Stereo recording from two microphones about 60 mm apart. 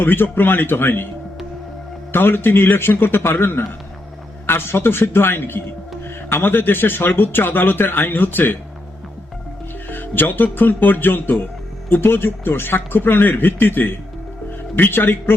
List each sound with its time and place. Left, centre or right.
0.0 s speech: left
2.1 s speech: left
9.9 s speech: left